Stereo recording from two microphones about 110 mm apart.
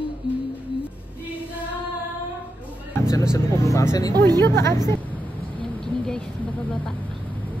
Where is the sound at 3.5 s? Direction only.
30° left (ahead or behind).